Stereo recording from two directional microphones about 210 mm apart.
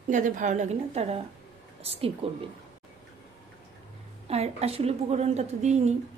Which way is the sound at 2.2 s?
30° right (ahead or behind).